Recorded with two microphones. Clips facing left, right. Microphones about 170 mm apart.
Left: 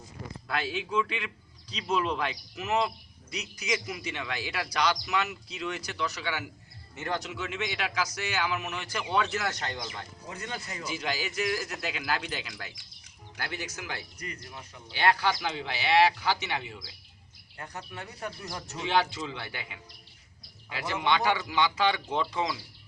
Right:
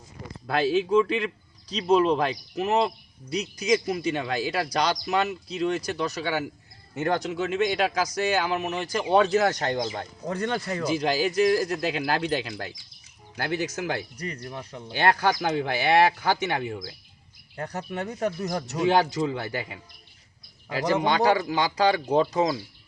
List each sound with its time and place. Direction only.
0.4 s a man's voice: 40° right (ahead or behind)
6.9 s speech: 55° right (ahead or behind)
7.2 s a man's voice: 40° right (ahead or behind)
14.4 s speech: 55° right (ahead or behind)
14.9 s speech: 45° right (ahead or behind)
17.9 s speech: 65° right (ahead or behind)
18.8 s a man's voice: 40° right (ahead or behind)